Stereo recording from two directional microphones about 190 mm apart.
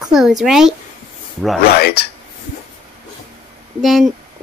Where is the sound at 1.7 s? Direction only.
55° left (ahead or behind).